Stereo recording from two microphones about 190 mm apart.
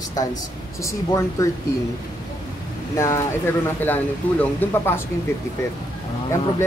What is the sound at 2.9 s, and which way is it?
Speech, 15° left (ahead or behind).